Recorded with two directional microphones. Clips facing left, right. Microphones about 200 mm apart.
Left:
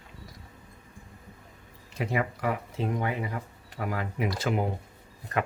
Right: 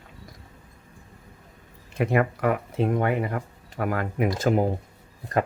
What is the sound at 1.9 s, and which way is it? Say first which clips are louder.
Speech: right 7 dB; 55° right (ahead or behind).